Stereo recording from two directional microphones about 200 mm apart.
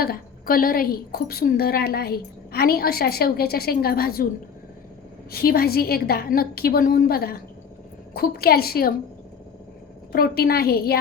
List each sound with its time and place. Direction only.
0.0 s a woman's voice: 45° left (ahead or behind)
5.3 s a woman's voice: 50° left (ahead or behind)
10.1 s a woman's voice: 50° left (ahead or behind)